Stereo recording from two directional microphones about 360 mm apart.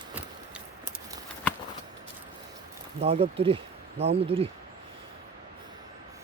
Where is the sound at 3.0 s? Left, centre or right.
Centre.